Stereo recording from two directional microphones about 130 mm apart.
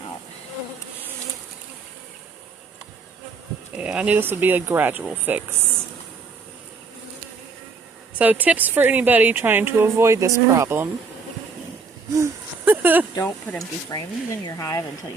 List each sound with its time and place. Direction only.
3.8 s a woman's voice: 10° right (ahead or behind)
8.2 s a woman's voice: 10° right (ahead or behind)
12.1 s a sound: 20° right (ahead or behind)
13.6 s speech: 25° left (ahead or behind)